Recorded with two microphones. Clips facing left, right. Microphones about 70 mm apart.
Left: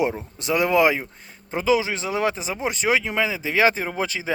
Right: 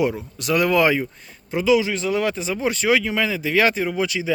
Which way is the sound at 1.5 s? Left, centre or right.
Left.